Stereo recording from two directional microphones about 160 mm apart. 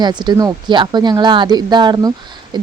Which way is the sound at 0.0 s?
25° right (ahead or behind).